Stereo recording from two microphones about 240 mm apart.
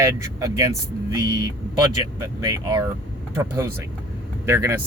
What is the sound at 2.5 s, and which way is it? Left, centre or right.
Speech, centre.